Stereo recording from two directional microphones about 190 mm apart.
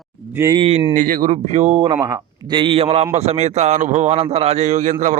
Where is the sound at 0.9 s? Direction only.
45° right (ahead or behind).